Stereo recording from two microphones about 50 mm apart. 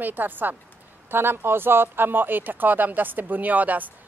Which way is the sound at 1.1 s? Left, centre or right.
Right.